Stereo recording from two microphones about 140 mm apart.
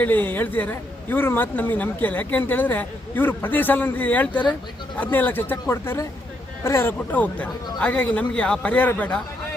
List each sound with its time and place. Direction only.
0.0 s a man's voice: 15° left (ahead or behind)